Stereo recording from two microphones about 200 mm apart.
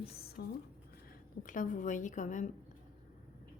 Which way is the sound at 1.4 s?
40° left (ahead or behind).